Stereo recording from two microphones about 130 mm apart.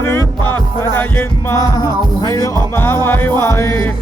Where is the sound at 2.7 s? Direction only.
20° left (ahead or behind).